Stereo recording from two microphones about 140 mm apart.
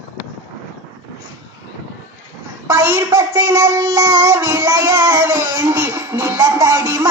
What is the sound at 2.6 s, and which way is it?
A child's voice, 15° right (ahead or behind).